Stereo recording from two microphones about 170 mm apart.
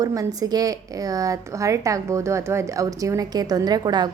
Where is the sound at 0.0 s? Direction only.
20° right (ahead or behind).